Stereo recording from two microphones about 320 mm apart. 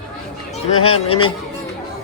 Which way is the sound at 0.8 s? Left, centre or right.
Left.